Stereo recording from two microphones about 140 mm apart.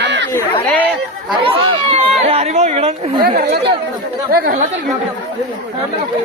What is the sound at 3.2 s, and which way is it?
Speech, 90° right.